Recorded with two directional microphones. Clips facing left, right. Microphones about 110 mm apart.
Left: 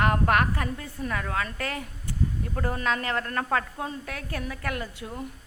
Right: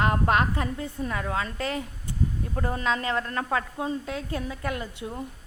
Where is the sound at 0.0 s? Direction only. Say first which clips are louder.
Even; 20° right (ahead or behind).